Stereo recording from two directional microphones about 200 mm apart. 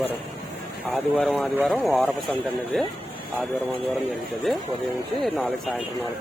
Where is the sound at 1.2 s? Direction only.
Centre (ahead or behind).